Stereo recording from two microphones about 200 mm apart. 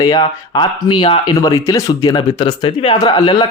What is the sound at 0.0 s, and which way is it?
Speech, 20° left (ahead or behind).